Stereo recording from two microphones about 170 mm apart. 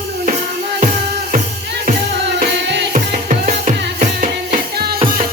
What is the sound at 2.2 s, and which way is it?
Music, 90° right.